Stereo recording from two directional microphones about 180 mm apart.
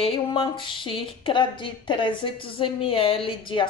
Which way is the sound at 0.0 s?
30° left (ahead or behind).